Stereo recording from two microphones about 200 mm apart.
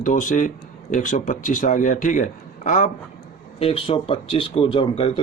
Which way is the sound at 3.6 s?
30° left (ahead or behind).